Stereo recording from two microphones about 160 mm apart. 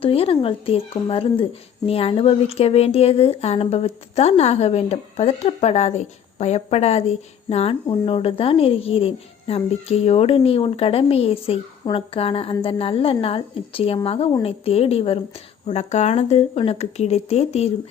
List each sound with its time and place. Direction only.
0.0 s speech: 35° left (ahead or behind)